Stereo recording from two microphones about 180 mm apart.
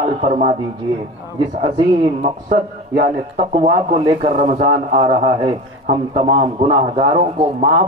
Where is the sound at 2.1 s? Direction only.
45° right (ahead or behind).